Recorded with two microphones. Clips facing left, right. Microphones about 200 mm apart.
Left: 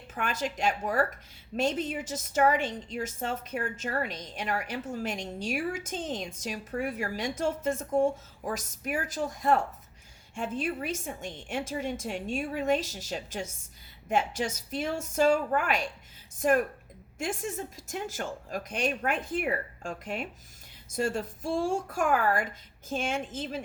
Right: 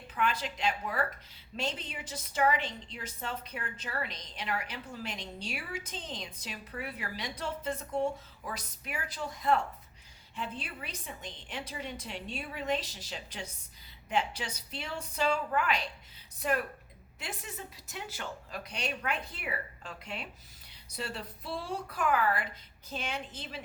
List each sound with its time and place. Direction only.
0.1 s a woman's voice: 45° left (ahead or behind)